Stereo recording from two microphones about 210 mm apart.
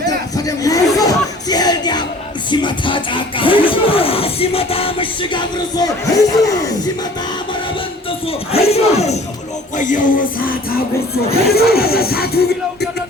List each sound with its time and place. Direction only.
0.3 s chatter: 15° left (ahead or behind)
0.9 s music: 20° left (ahead or behind)
8.3 s battle cry: 30° left (ahead or behind)
9.7 s music: 35° left (ahead or behind)
11.5 s music: 50° left (ahead or behind)